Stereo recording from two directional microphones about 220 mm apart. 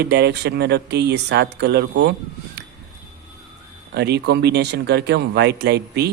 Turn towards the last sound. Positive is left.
turn(degrees=-50)  # may be behind; listen again after turning